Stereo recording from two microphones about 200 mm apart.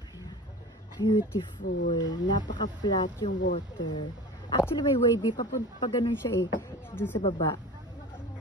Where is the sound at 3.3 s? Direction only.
40° left (ahead or behind).